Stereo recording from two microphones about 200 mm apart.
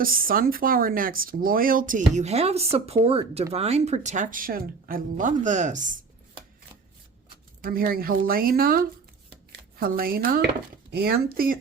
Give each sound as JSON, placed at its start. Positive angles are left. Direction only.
{"t": 0.0, "sound": "speech", "side_deg": -45}
{"t": 7.6, "sound": "speech", "side_deg": -45}